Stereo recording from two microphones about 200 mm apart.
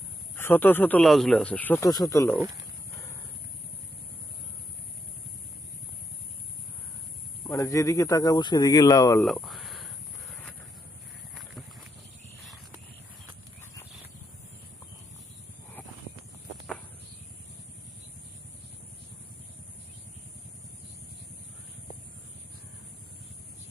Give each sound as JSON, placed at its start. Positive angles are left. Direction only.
{"t": 0.4, "sound": "speech", "side_deg": 10}
{"t": 2.9, "sound": "a sound", "side_deg": 15}
{"t": 7.4, "sound": "speech", "side_deg": 15}
{"t": 9.2, "sound": "speech", "side_deg": 0}